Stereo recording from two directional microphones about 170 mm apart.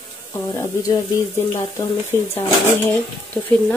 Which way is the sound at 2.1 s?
15° left (ahead or behind).